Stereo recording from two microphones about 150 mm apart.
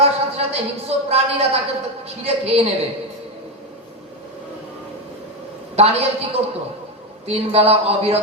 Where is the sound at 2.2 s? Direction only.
45° right (ahead or behind).